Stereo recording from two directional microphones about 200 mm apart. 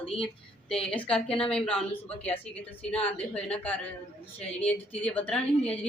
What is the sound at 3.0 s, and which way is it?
Speech, 5° left (ahead or behind).